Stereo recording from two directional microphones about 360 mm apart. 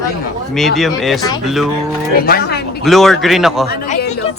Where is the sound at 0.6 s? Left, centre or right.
Centre.